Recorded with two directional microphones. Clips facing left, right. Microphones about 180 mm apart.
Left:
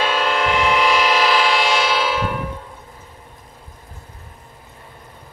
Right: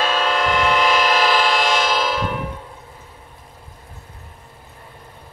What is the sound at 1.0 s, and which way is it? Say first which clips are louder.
Train: even; 45° right (ahead or behind).